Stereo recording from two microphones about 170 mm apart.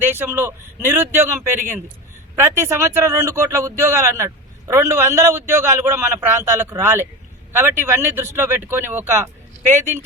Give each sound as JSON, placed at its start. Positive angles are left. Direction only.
{"t": 0.0, "sound": "a man's voice", "side_deg": -10}